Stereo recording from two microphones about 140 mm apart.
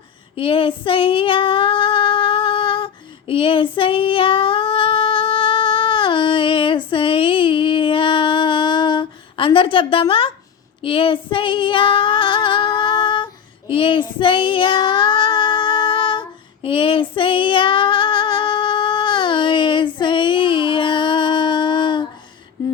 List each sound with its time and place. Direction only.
0.3 s female singing: 40° left (ahead or behind)
13.7 s child singing: 40° left (ahead or behind)
16.6 s female singing: 40° left (ahead or behind)